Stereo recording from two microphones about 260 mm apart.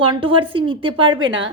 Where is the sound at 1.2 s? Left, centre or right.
Right.